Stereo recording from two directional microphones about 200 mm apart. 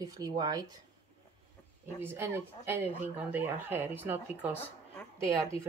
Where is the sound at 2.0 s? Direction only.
10° right (ahead or behind).